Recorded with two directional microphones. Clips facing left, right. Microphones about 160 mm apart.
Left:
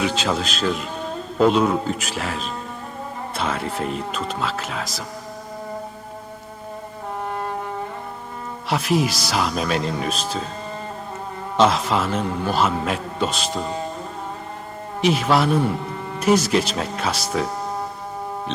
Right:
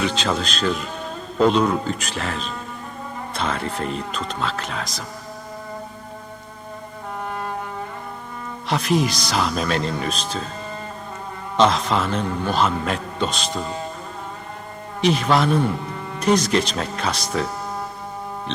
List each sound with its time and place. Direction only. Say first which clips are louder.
0.0 s a man's voice: even; 5° left (ahead or behind)
7.3 s music: left 1 dB; 35° left (ahead or behind)
8.7 s a man's voice: even; 5° left (ahead or behind)
11.5 s a man's voice: even; 5° left (ahead or behind)
15.0 s a man's voice: even; 5° left (ahead or behind)